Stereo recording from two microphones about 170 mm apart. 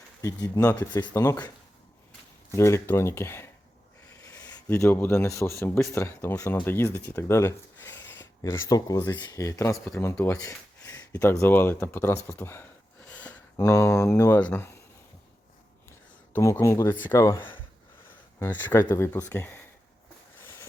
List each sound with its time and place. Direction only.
0.2 s speech: 20° left (ahead or behind)
2.5 s speech: 15° left (ahead or behind)
13.1 s a sound: 10° left (ahead or behind)
13.6 s speech: 15° left (ahead or behind)
16.3 s speech: 15° left (ahead or behind)